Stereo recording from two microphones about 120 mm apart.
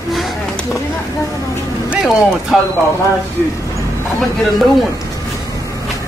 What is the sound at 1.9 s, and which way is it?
Speech, 5° right (ahead or behind).